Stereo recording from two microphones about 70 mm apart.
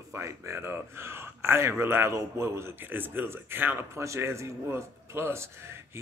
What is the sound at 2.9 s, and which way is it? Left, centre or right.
Speech, right.